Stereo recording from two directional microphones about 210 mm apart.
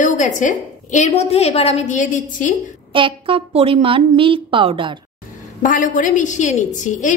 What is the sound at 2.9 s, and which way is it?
A woman's voice, 25° right (ahead or behind).